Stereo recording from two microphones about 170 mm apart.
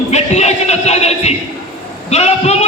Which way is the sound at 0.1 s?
40° left (ahead or behind).